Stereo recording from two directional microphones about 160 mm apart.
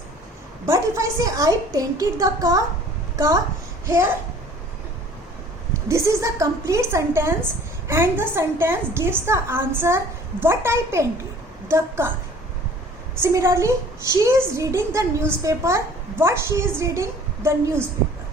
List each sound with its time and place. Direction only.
0.6 s a woman's voice: 20° right (ahead or behind)
3.8 s a woman's voice: 15° right (ahead or behind)
5.9 s a woman's voice: 20° right (ahead or behind)
13.2 s a woman's voice: 15° right (ahead or behind)